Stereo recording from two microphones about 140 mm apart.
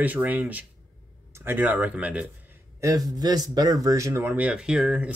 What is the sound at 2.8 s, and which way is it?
Speech, 25° right (ahead or behind).